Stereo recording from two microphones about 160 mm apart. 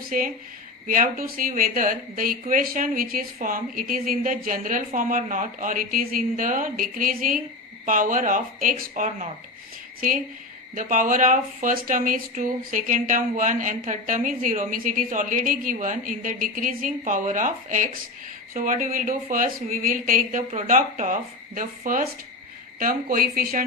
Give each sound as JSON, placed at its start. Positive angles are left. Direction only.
{"t": 0.1, "sound": "speech", "side_deg": -55}
{"t": 10.8, "sound": "speech", "side_deg": -55}